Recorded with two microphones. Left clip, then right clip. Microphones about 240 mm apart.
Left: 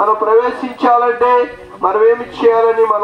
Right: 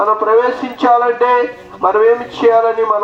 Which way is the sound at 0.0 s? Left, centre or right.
Right.